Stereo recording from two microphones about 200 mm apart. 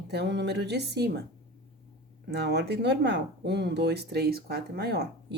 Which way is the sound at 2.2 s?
55° right (ahead or behind).